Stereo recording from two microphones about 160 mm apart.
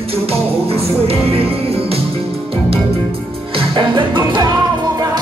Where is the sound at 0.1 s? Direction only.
40° right (ahead or behind).